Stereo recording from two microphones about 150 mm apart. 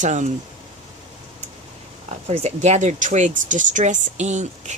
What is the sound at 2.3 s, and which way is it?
Speech, 45° right (ahead or behind).